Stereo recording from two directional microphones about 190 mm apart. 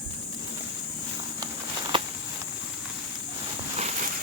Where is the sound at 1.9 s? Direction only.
25° right (ahead or behind).